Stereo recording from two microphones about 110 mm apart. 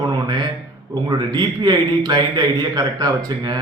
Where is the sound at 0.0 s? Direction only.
40° right (ahead or behind).